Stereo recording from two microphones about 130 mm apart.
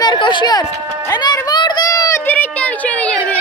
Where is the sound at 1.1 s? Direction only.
30° left (ahead or behind).